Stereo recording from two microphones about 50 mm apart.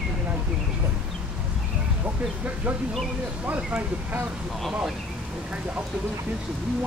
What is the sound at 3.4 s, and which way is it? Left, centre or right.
Speech, right.